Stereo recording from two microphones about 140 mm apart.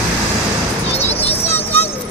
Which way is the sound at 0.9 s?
50° left (ahead or behind).